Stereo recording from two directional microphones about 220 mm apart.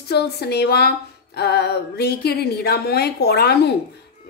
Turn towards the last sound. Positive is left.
turn(degrees=45)  # may be behind; listen again after turning